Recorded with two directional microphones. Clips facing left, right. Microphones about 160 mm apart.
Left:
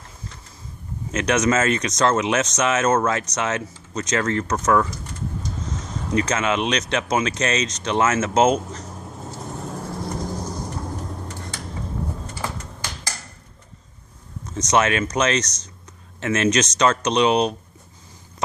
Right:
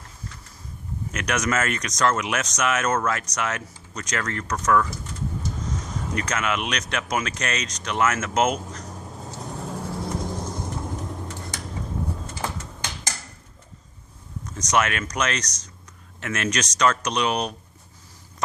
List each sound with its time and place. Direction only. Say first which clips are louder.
1.1 s speech: left 6 dB; 25° left (ahead or behind)
6.2 s speech: left 5 dB; 25° left (ahead or behind)
8.9 s vehicle: left 2 dB; 5° left (ahead or behind)
14.5 s speech: left 4 dB; 25° left (ahead or behind)